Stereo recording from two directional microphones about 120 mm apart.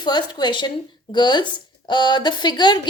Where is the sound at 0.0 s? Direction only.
35° left (ahead or behind).